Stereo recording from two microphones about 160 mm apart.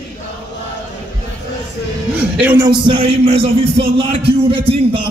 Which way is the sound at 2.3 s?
10° right (ahead or behind).